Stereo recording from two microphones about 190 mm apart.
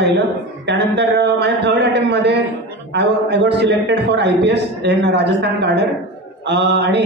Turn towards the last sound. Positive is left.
turn(degrees=-65)  # may be behind; listen again after turning